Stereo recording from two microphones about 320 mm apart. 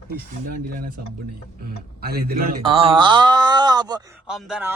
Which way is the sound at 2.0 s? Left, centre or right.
Right.